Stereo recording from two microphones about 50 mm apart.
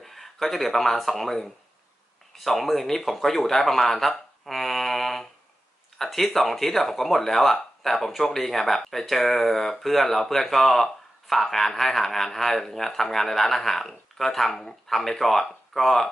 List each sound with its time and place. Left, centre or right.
0.0 s speech: centre